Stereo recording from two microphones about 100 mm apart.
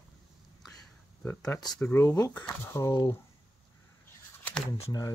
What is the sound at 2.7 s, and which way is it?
Speech, 30° left (ahead or behind).